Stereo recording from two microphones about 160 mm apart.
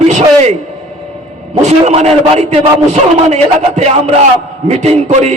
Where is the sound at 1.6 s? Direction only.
45° right (ahead or behind).